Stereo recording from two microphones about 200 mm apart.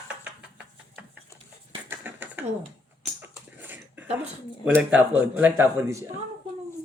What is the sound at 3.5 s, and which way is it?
Dog, 10° right (ahead or behind).